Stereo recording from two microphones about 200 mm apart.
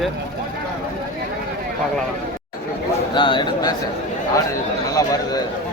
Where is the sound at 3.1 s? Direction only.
25° left (ahead or behind).